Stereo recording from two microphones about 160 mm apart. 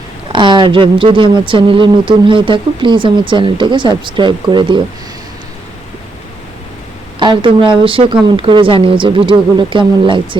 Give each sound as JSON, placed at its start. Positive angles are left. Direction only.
{"t": 0.3, "sound": "speech", "side_deg": -30}
{"t": 7.2, "sound": "speech", "side_deg": -30}